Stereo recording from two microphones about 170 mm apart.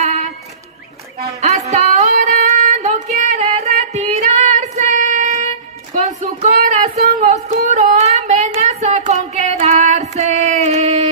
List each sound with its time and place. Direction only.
0.0 s a sound: 45° right (ahead or behind)
1.4 s child singing: 40° right (ahead or behind)
6.6 s child singing: 40° right (ahead or behind)
8.5 s music: 40° right (ahead or behind)